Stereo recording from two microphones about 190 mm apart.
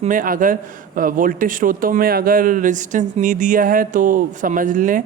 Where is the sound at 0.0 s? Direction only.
45° right (ahead or behind).